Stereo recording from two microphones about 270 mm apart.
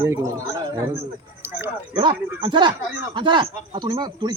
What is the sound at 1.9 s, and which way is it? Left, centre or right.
Speech, centre.